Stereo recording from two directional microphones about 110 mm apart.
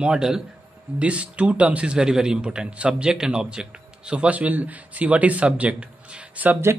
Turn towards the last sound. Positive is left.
turn(degrees=-20)  # may be behind; listen again after turning